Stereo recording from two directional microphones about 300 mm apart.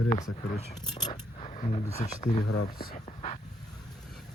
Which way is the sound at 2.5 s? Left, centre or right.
Left.